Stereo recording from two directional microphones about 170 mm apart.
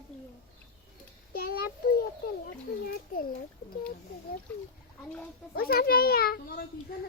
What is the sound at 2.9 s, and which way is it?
Speech, 60° left (ahead or behind).